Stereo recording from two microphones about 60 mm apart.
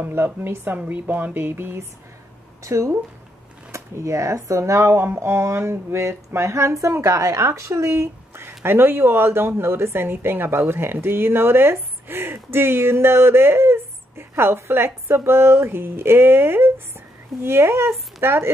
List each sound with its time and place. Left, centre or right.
0.1 s a woman's voice: right
2.6 s speech: right